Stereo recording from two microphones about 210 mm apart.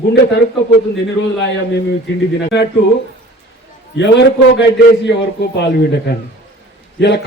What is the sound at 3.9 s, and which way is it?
A man's voice, 55° left (ahead or behind).